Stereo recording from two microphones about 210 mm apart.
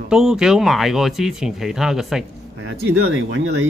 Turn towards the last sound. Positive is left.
turn(degrees=-55)  # may be behind; listen again after turning